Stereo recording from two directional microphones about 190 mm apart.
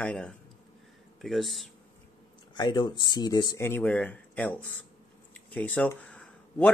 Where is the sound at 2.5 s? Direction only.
25° left (ahead or behind).